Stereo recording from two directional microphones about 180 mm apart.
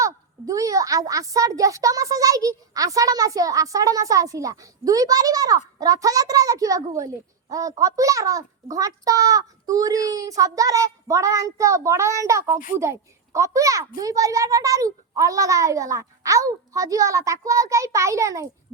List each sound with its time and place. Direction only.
0.0 s a woman's voice: 20° right (ahead or behind)